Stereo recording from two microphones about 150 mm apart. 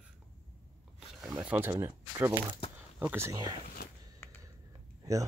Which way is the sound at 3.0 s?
15° right (ahead or behind).